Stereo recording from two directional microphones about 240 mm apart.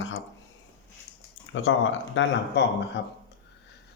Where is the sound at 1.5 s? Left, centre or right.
Left.